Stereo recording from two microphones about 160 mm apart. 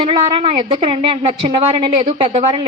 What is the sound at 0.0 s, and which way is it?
A woman's voice, 35° right (ahead or behind).